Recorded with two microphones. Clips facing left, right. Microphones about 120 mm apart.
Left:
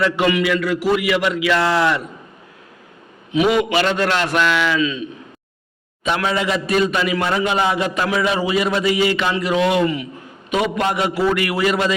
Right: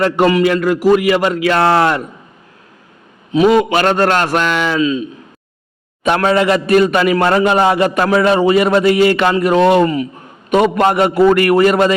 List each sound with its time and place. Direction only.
0.0 s a man's voice: 40° right (ahead or behind)
3.3 s a man's voice: 40° right (ahead or behind)
4.8 s a man's voice: 35° right (ahead or behind)
6.0 s a man's voice: 60° right (ahead or behind)